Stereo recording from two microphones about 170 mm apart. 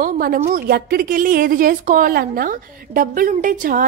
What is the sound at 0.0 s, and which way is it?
A woman's voice, 60° right (ahead or behind).